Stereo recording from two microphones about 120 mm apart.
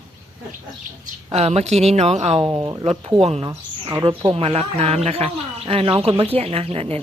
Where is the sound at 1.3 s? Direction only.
65° right (ahead or behind).